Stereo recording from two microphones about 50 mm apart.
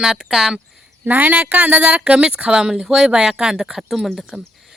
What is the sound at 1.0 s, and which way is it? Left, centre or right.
Speech, right.